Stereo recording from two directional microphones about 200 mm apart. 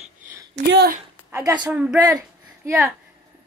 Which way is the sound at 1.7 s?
5° right (ahead or behind).